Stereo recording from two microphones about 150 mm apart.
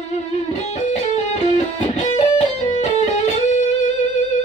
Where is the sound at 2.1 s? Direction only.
50° left (ahead or behind).